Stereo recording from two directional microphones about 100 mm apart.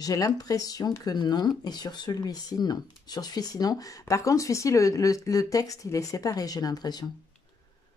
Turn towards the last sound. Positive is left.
turn(degrees=40)  # may be behind; listen again after turning